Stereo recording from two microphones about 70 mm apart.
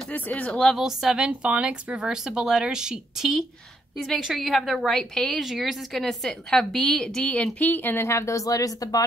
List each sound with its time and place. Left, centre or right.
0.1 s a woman's voice: left
0.7 s a woman's voice: centre
5.4 s a woman's voice: centre; by 8.1 s left
8.1 s speech: left